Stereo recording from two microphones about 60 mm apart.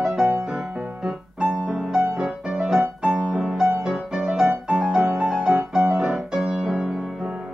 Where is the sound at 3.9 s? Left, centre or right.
Centre.